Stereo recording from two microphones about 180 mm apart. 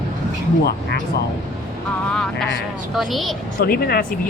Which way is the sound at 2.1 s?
5° left (ahead or behind).